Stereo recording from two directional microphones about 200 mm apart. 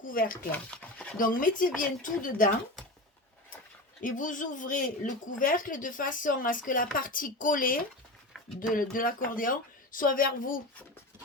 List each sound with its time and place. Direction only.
0.0 s speech: 45° left (ahead or behind)
0.5 s speech: 5° left (ahead or behind)
1.2 s speech: 45° left (ahead or behind)
4.0 s speech: 40° left (ahead or behind)